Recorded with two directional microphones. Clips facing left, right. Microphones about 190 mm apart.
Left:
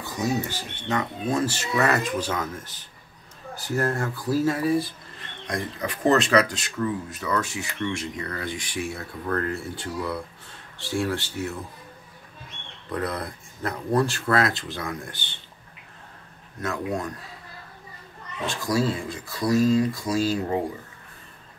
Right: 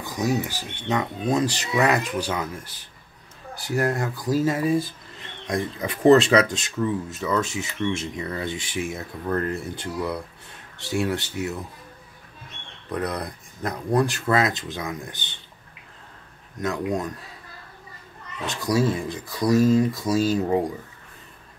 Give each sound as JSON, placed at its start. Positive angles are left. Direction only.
{"t": 0.0, "sound": "speech", "side_deg": -15}
{"t": 12.9, "sound": "speech", "side_deg": -20}
{"t": 16.6, "sound": "speech", "side_deg": -20}
{"t": 18.5, "sound": "speech", "side_deg": -20}